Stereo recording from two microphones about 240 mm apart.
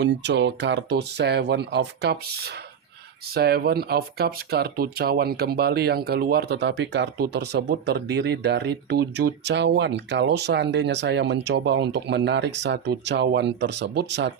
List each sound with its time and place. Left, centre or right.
0.0 s speech: right